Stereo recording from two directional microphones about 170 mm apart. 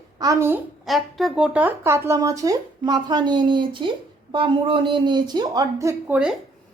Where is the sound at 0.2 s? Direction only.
20° right (ahead or behind).